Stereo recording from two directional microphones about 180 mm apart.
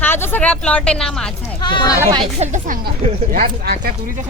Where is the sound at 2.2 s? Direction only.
40° right (ahead or behind).